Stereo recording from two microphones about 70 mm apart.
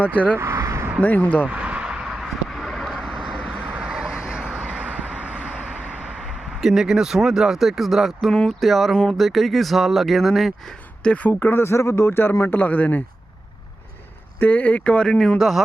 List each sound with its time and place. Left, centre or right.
0.0 s speech: left
0.3 s vehicle: right
1.0 s speech: left
1.5 s vehicle: centre
4.7 s vehicle: centre
6.1 s speech: centre
11.0 s speech: centre
11.3 s speech: left
14.3 s speech: left; by 15.6 s centre